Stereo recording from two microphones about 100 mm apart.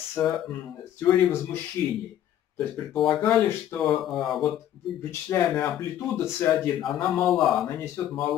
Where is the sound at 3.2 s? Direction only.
20° left (ahead or behind).